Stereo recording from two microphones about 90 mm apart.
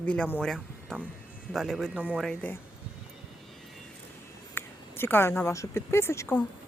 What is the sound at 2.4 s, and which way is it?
Speech, 15° left (ahead or behind).